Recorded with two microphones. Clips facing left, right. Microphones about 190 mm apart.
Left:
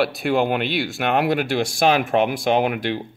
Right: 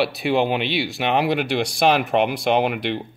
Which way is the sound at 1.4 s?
50° left (ahead or behind).